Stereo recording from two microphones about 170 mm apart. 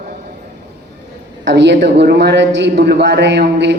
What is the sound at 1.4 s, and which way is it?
A man's voice, 90° right.